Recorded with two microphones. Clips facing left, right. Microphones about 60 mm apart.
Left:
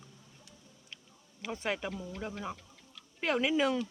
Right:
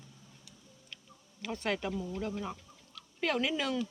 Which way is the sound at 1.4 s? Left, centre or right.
Centre.